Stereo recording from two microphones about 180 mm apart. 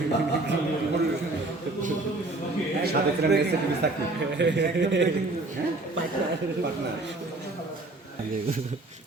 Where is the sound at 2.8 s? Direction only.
65° right (ahead or behind).